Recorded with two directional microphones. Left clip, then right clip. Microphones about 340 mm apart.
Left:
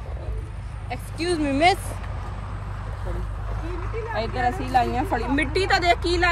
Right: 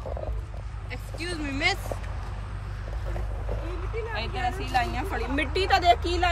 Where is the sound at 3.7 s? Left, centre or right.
Left.